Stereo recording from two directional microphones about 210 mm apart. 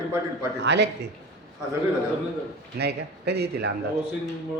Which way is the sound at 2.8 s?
50° right (ahead or behind).